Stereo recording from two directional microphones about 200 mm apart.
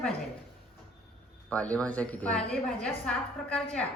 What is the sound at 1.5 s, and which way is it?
A woman's voice, 5° left (ahead or behind).